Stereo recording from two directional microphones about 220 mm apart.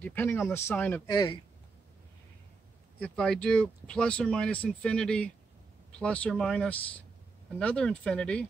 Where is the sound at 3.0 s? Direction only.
5° left (ahead or behind).